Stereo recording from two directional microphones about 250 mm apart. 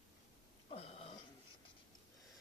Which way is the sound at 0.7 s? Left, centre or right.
Left.